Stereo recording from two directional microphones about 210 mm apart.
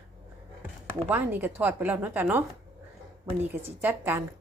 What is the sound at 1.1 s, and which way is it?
A woman's voice, 10° right (ahead or behind).